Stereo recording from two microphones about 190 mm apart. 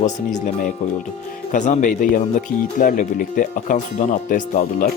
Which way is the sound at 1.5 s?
40° left (ahead or behind).